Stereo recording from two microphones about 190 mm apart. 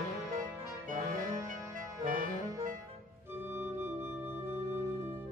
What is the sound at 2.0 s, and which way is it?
Saxophone, 45° right (ahead or behind).